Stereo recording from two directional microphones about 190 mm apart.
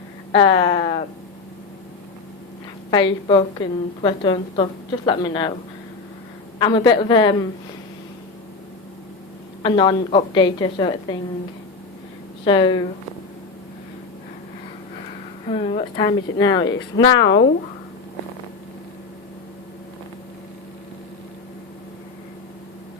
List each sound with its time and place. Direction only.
0.3 s a woman's voice: 25° left (ahead or behind)
2.9 s a woman's voice: 25° left (ahead or behind)
6.6 s a woman's voice: 25° left (ahead or behind)
9.6 s a woman's voice: 25° left (ahead or behind)
12.5 s a woman's voice: 25° left (ahead or behind)
15.4 s a woman's voice: 30° left (ahead or behind)